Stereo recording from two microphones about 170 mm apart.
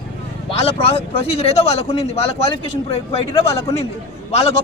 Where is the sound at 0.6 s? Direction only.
35° left (ahead or behind).